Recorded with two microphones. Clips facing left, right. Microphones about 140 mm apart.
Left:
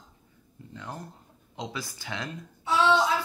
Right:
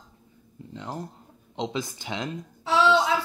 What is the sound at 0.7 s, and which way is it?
Speech, 20° right (ahead or behind).